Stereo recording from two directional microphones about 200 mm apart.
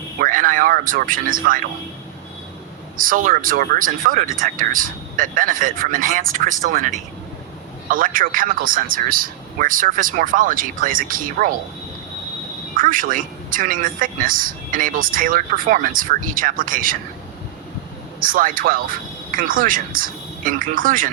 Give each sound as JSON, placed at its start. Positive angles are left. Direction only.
{"t": 0.2, "sound": "speech", "side_deg": -40}
{"t": 3.0, "sound": "a woman's voice", "side_deg": -45}
{"t": 12.7, "sound": "a woman's voice", "side_deg": -45}
{"t": 18.2, "sound": "a woman's voice", "side_deg": -45}